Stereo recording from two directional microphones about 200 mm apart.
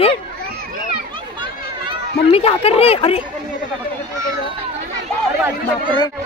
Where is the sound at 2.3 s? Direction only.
30° left (ahead or behind).